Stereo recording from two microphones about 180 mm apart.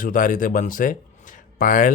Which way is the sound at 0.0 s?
45° left (ahead or behind).